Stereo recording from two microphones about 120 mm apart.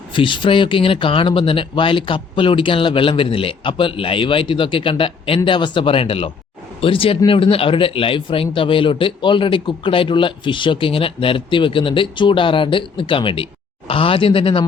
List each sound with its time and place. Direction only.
0.1 s speech: 45° left (ahead or behind)